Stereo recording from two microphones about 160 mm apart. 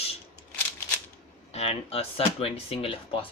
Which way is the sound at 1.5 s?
40° left (ahead or behind).